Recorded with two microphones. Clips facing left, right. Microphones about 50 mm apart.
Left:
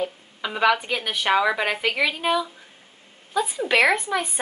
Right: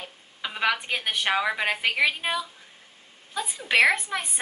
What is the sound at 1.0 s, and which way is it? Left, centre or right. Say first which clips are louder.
A woman's voice: left 4 dB; centre.